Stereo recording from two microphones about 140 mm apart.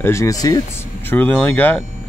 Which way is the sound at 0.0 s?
20° left (ahead or behind).